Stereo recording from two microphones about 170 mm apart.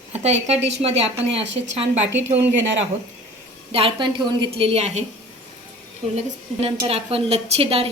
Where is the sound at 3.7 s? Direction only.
30° right (ahead or behind).